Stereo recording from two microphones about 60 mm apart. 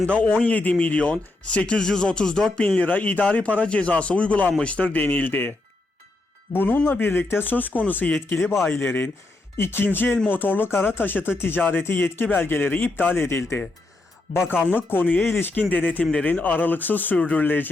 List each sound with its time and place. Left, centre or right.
0.1 s speech: centre; by 15.6 s left
15.7 s speech: left
17.4 s speech: left